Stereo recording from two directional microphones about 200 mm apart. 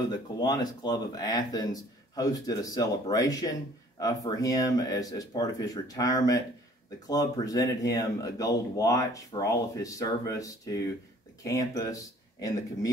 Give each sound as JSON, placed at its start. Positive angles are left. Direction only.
{"t": 0.1, "sound": "speech", "side_deg": 20}